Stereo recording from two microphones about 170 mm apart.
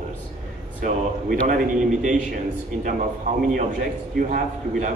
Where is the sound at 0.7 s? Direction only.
50° right (ahead or behind).